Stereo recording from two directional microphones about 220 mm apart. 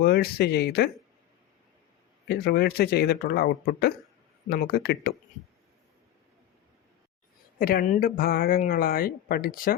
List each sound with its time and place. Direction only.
0.0 s speech: 45° left (ahead or behind)
2.2 s speech: 45° left (ahead or behind)
7.6 s speech: 40° left (ahead or behind)